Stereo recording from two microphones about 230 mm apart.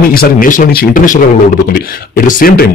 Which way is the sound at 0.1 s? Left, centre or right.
Left.